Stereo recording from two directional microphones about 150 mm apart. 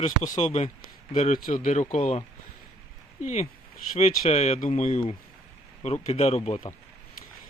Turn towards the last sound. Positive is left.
turn(degrees=45)  # may be behind; listen again after turning